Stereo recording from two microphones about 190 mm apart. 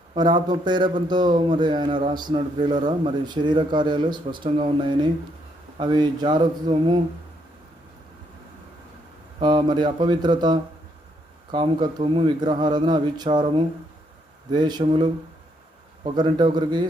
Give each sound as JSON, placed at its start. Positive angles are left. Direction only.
{"t": 0.1, "sound": "a man's voice", "side_deg": -20}
{"t": 9.4, "sound": "a man's voice", "side_deg": -25}
{"t": 14.5, "sound": "a man's voice", "side_deg": -20}